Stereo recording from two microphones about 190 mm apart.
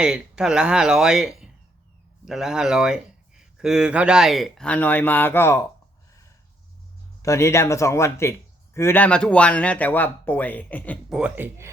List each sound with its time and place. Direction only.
0.0 s speech: 5° right (ahead or behind); by 5.6 s 15° left (ahead or behind)
7.2 s speech: 15° left (ahead or behind)
11.1 s speech: 10° right (ahead or behind)